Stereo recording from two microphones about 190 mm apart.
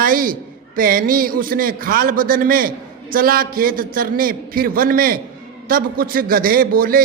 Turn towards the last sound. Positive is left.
turn(degrees=-50)  # may be behind; listen again after turning